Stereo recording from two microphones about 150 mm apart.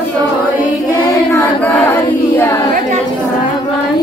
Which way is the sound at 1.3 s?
10° left (ahead or behind).